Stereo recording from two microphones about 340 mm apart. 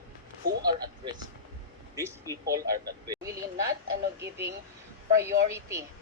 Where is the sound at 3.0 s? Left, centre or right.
Centre.